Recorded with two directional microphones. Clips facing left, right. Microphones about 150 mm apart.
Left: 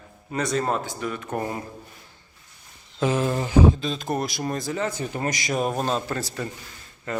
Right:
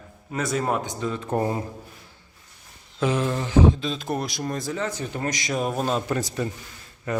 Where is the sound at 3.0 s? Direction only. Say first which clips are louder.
Left 1 dB; 5° left (ahead or behind).